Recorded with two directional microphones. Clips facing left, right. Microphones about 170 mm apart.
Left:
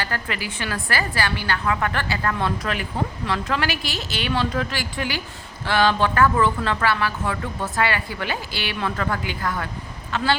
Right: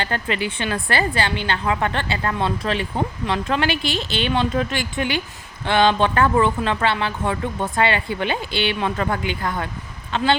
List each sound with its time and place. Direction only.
0.0 s speech: 25° right (ahead or behind)